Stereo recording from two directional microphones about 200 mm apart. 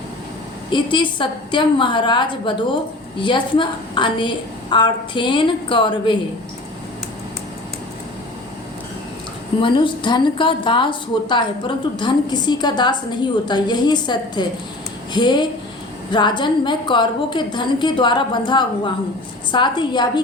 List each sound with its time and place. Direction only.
0.7 s a woman's voice: 25° left (ahead or behind)
9.6 s a woman's voice: 25° left (ahead or behind)